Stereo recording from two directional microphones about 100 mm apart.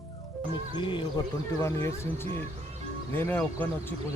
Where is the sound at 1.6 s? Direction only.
30° left (ahead or behind).